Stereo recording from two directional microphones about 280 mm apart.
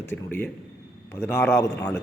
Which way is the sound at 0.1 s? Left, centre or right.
Centre.